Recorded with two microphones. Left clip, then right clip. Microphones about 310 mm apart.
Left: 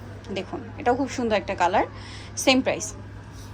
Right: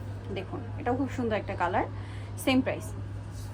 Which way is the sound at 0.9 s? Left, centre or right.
Centre.